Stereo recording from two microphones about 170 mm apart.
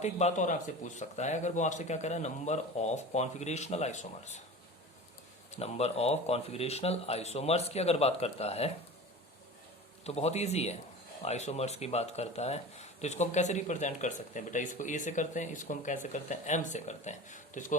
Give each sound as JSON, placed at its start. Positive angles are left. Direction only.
{"t": 0.0, "sound": "speech", "side_deg": 40}
{"t": 5.5, "sound": "speech", "side_deg": 35}
{"t": 10.0, "sound": "speech", "side_deg": 40}